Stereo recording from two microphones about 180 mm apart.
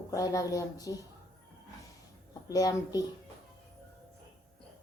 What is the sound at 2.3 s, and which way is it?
Speech, 20° left (ahead or behind).